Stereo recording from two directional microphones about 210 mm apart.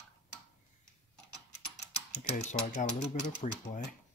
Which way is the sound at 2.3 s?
35° left (ahead or behind).